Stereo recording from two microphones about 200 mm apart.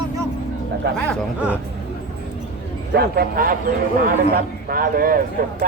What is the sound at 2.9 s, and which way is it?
Speech, 50° right (ahead or behind).